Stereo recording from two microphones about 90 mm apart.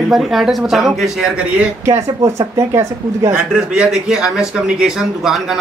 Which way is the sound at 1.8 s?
35° right (ahead or behind).